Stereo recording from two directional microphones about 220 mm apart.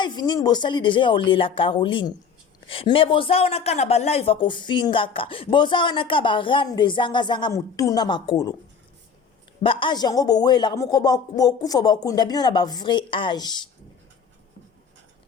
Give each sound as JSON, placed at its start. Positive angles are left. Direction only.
{"t": 0.0, "sound": "speech", "side_deg": 20}
{"t": 9.6, "sound": "speech", "side_deg": 20}